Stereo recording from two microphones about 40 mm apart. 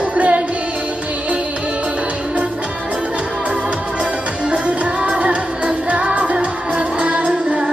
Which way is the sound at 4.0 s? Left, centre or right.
Right.